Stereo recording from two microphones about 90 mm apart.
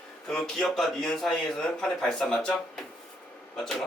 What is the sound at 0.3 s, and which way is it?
A man's voice, 5° left (ahead or behind).